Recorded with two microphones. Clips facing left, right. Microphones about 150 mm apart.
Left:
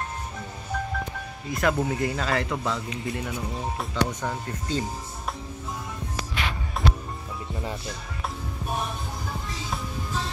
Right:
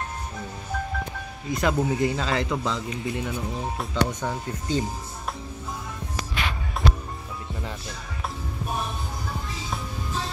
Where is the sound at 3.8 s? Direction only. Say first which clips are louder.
Right 1 dB; 5° left (ahead or behind).